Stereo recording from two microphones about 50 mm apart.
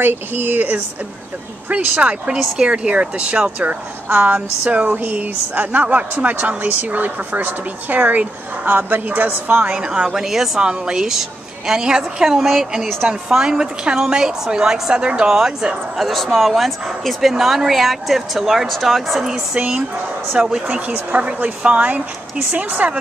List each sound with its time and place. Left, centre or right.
0.0 s speech: right
1.7 s speech: right
2.3 s a woman's voice: centre
2.7 s speech: right
9.8 s a woman's voice: centre
16.0 s speech: centre
19.5 s a woman's voice: right
20.7 s speech: right